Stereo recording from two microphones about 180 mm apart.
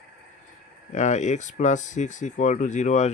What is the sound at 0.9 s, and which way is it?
Speech, 40° left (ahead or behind).